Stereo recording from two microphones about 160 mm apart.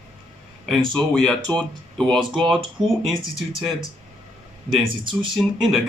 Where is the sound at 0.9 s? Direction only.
5° left (ahead or behind).